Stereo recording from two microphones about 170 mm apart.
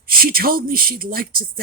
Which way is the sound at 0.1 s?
60° right (ahead or behind).